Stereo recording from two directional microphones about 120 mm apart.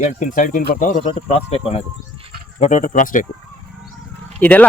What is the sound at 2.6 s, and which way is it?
Speech, 90° left.